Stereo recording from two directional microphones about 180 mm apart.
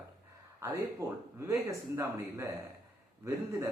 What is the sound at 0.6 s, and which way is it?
Speech, 15° right (ahead or behind).